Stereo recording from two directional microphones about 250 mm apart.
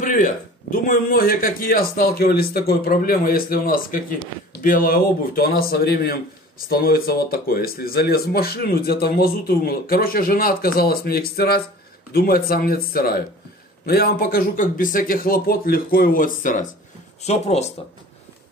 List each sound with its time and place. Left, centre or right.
0.0 s a man's voice: left